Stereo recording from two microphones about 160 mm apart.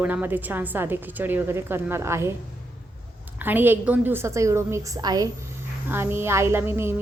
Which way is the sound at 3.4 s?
10° right (ahead or behind).